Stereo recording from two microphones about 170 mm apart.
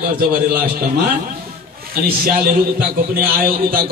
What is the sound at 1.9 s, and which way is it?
Speech, 60° right (ahead or behind).